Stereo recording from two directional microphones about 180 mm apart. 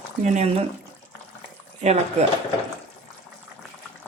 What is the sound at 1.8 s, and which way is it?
Speech, 40° right (ahead or behind).